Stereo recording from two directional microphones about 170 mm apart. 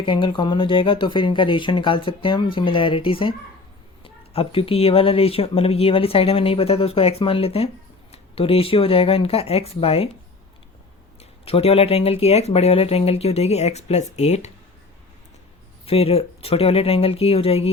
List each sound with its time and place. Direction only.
0.0 s speech: 30° left (ahead or behind)
11.2 s speech: 35° left (ahead or behind)
15.9 s speech: 35° left (ahead or behind)